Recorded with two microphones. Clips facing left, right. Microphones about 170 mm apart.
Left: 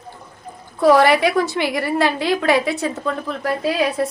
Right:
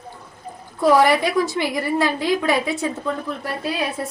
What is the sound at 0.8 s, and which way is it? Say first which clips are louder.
A woman's voice: left 2 dB; 70° left (ahead or behind).